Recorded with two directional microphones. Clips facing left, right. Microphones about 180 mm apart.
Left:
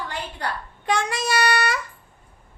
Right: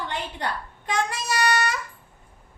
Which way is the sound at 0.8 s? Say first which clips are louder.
Left 3 dB; 75° left (ahead or behind).